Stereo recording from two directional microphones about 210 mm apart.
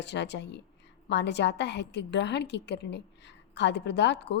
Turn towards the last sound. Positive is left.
turn(degrees=55)  # may be behind; listen again after turning